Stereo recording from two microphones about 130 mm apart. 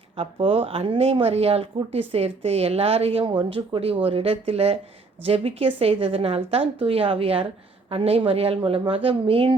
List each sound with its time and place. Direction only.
0.2 s speech: 45° right (ahead or behind)